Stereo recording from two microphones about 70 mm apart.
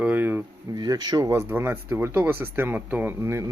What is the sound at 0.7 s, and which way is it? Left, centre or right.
Speech, right.